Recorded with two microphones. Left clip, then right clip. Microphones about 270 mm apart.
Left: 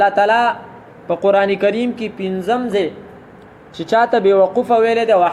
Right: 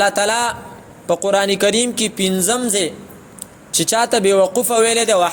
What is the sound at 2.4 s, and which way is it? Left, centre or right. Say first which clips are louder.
Speech: left 6 dB; right.